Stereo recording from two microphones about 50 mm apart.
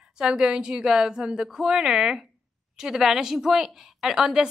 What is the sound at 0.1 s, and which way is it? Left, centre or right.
A woman's voice, centre.